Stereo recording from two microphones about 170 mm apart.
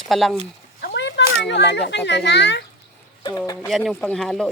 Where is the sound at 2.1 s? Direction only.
90° left.